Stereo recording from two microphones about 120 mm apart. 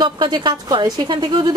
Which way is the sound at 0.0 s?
40° right (ahead or behind).